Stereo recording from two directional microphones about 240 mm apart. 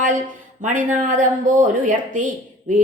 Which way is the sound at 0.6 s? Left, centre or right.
Right.